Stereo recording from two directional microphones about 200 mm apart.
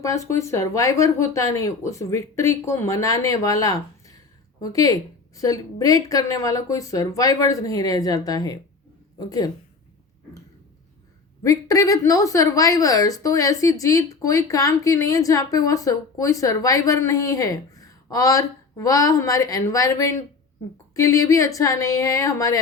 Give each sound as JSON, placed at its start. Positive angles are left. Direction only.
{"t": 0.0, "sound": "a woman's voice", "side_deg": 15}
{"t": 11.4, "sound": "a woman's voice", "side_deg": 15}